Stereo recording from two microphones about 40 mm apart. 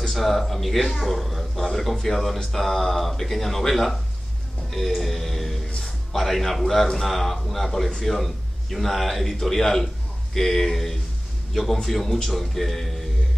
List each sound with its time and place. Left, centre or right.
0.1 s speech: centre
4.6 s a sound: centre
5.8 s speech: centre